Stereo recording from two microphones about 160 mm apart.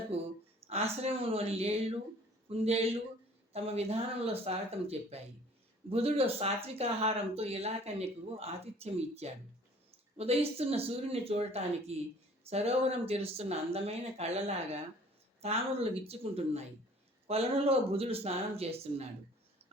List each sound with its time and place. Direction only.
0.1 s speech: 40° right (ahead or behind)